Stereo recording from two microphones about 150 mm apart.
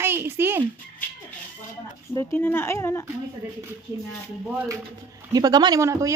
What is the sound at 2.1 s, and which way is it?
Speech, 15° left (ahead or behind).